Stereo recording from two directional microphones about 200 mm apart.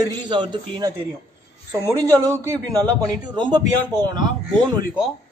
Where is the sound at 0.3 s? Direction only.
25° right (ahead or behind).